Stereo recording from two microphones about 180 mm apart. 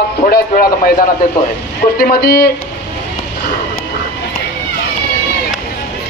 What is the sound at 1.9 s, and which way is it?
Speech, 55° left (ahead or behind).